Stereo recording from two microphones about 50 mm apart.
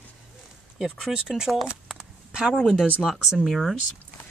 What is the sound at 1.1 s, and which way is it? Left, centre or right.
Speech, centre.